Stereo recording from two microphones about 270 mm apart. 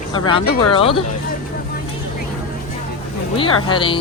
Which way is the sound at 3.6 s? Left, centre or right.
Centre.